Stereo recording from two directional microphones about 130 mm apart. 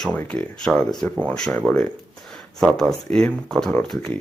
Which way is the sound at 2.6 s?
5° left (ahead or behind).